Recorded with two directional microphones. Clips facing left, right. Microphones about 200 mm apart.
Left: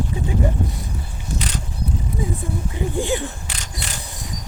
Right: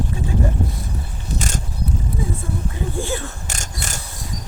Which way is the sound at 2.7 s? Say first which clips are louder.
Left 5 dB; 15° left (ahead or behind).